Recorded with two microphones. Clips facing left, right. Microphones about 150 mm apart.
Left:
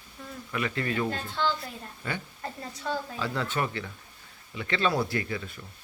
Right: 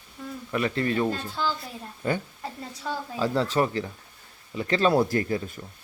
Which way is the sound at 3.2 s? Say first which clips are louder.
Right 10 dB; 35° right (ahead or behind).